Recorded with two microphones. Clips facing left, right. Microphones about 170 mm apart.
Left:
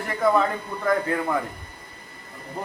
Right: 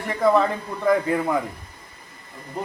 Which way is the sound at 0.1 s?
Centre (ahead or behind).